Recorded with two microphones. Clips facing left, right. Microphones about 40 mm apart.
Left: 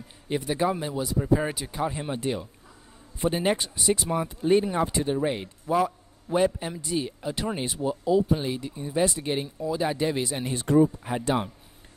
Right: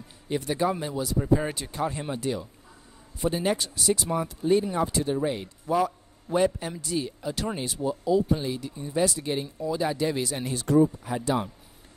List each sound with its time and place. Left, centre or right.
0.3 s speech: centre
2.1 s speech: left